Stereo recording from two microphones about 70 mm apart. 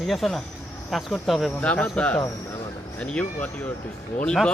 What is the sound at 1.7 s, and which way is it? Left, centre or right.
Speech, centre.